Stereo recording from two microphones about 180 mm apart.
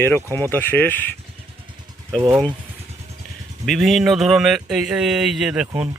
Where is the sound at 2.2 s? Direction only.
15° right (ahead or behind).